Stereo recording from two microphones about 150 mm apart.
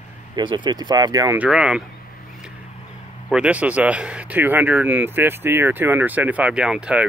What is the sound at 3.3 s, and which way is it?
Speech, 5° right (ahead or behind).